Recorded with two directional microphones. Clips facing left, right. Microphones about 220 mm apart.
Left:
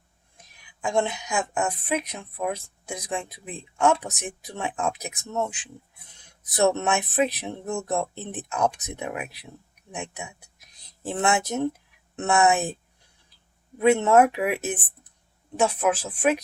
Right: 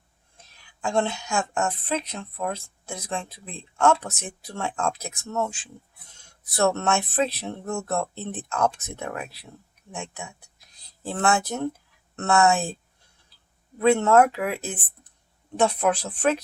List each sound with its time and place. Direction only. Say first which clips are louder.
0.3 s a woman's voice: even; 15° left (ahead or behind)
15.5 s a woman's voice: right 1 dB; 5° left (ahead or behind)